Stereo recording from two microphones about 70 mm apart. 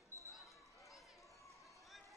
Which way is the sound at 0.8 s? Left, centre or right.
Centre.